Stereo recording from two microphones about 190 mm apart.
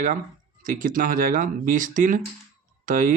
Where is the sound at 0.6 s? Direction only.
45° right (ahead or behind).